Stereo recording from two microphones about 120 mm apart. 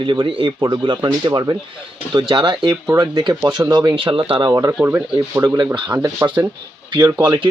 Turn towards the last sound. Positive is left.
turn(degrees=-40)  # may be behind; listen again after turning